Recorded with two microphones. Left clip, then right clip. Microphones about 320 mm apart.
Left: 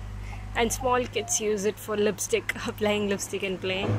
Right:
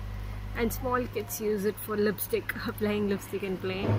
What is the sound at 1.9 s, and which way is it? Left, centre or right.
A woman's voice, centre.